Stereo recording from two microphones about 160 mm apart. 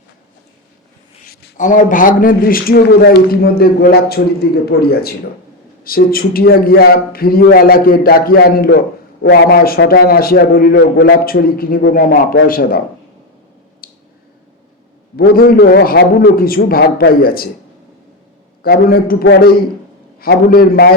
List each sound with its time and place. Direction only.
1.3 s a sound: 90° left
1.5 s a man's voice: 55° left (ahead or behind); by 8.8 s 70° left (ahead or behind)
9.2 s a man's voice: 85° left; by 12.8 s 60° left (ahead or behind)
13.8 s a sound: 65° left (ahead or behind)
15.1 s a man's voice: 70° left (ahead or behind)
18.6 s a man's voice: 70° left (ahead or behind)